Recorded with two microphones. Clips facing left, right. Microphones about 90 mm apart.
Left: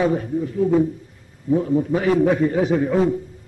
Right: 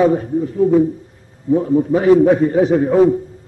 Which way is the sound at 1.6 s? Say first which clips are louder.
Right 6 dB; 30° right (ahead or behind).